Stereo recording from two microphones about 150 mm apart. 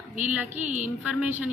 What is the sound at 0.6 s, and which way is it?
Speech, 55° right (ahead or behind).